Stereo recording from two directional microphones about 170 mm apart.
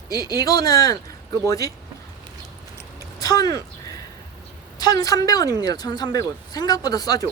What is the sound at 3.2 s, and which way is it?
Speech, 20° left (ahead or behind).